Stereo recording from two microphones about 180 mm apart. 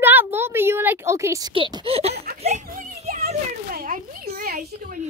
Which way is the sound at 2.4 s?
40° right (ahead or behind).